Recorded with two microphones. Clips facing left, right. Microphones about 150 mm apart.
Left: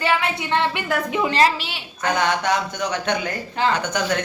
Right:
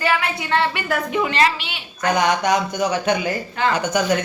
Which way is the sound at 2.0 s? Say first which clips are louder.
Right 2 dB; 15° right (ahead or behind).